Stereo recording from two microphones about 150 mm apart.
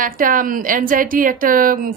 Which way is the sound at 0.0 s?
65° right (ahead or behind).